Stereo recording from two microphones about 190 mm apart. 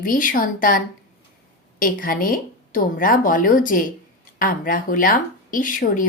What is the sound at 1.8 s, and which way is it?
A woman's voice, 50° left (ahead or behind).